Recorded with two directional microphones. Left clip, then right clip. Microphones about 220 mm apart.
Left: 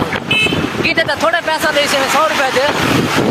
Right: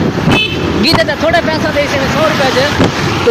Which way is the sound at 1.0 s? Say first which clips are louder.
Right 3 dB; 20° left (ahead or behind).